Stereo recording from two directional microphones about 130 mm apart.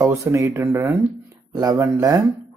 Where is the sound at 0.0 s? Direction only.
20° right (ahead or behind).